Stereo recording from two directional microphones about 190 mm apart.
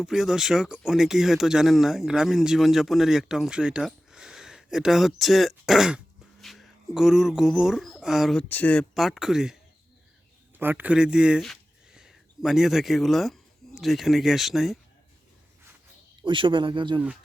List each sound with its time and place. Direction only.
0.0 s speech: centre (ahead or behind)
10.6 s speech: 10° right (ahead or behind)
16.2 s speech: 25° right (ahead or behind)